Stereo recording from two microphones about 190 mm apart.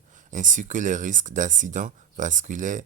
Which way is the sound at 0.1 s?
40° right (ahead or behind).